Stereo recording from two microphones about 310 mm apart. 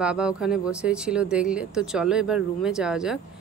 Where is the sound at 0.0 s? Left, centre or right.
Centre.